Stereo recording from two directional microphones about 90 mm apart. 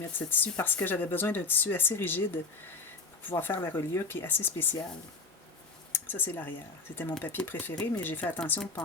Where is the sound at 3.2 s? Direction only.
20° left (ahead or behind).